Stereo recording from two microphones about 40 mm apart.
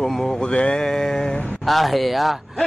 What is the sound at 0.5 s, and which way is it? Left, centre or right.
Mantra, left.